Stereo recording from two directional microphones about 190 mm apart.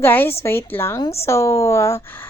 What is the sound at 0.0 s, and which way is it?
A woman's voice, 10° left (ahead or behind).